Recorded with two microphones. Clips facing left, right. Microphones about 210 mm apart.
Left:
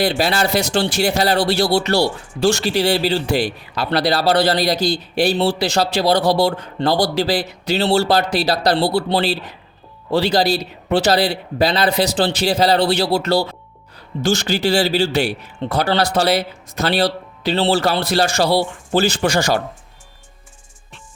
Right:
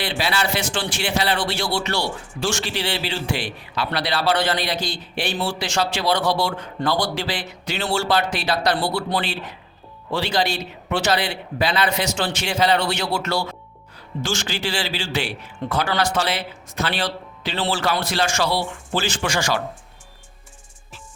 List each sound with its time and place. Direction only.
0.0 s speech: 40° left (ahead or behind)